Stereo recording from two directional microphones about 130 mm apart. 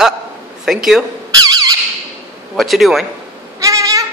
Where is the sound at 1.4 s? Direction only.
30° right (ahead or behind).